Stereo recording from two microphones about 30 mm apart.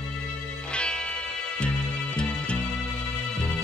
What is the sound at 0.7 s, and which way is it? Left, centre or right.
Music, left.